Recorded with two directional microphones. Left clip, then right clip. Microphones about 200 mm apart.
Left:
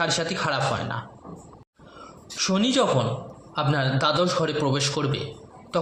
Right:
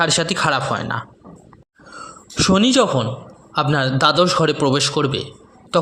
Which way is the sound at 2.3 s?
40° right (ahead or behind).